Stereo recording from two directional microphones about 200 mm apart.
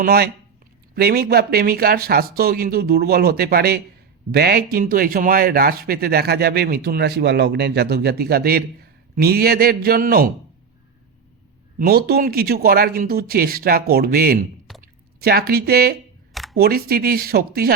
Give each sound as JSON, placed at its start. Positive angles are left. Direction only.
{"t": 0.0, "sound": "a man's voice", "side_deg": -50}
{"t": 11.8, "sound": "a man's voice", "side_deg": -50}
{"t": 16.3, "sound": "camera", "side_deg": 0}
{"t": 16.6, "sound": "a man's voice", "side_deg": -50}